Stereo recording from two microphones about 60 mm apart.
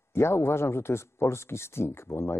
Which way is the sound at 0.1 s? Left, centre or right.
Left.